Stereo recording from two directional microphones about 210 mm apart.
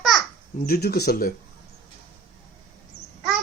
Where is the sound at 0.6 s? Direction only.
45° left (ahead or behind).